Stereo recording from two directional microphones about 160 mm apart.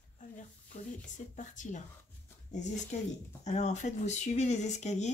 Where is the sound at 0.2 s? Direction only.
55° left (ahead or behind).